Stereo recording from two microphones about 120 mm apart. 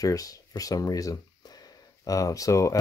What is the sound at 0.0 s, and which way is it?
Speech, 30° left (ahead or behind).